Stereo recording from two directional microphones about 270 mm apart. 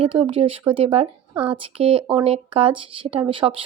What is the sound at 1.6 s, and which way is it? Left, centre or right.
Speech, right.